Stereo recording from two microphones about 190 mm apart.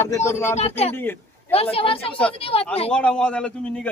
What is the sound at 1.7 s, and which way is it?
Speech, 30° left (ahead or behind).